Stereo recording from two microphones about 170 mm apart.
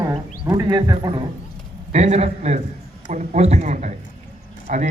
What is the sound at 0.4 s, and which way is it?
Speech, 20° right (ahead or behind).